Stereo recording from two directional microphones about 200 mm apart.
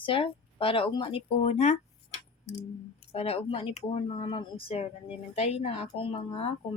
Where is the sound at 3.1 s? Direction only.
30° left (ahead or behind).